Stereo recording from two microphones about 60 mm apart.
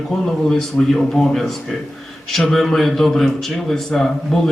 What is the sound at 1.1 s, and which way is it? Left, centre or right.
A man's voice, centre.